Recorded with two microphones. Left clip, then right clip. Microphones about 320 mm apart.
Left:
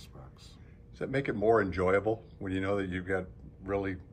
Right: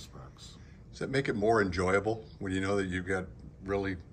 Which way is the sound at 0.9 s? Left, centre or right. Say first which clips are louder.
Right 1 dB; centre.